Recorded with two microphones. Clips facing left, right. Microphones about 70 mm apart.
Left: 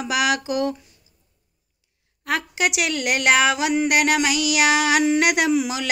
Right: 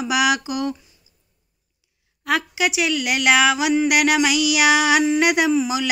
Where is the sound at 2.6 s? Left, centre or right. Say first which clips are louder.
Right 1 dB; left.